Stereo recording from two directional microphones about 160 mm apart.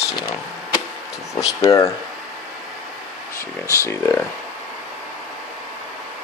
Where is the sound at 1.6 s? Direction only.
25° left (ahead or behind).